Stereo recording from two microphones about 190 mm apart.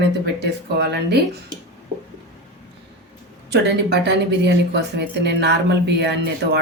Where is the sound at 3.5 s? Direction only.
60° right (ahead or behind).